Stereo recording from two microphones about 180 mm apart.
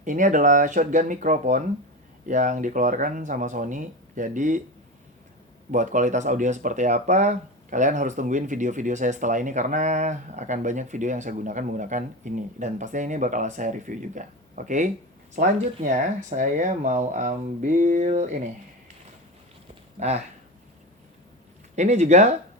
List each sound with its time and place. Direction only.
0.0 s speech: 45° right (ahead or behind)
5.7 s speech: 45° right (ahead or behind)
20.0 s speech: 35° right (ahead or behind)
21.8 s speech: 40° right (ahead or behind)